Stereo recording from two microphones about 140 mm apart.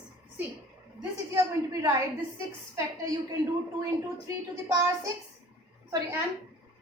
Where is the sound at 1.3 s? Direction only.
25° right (ahead or behind).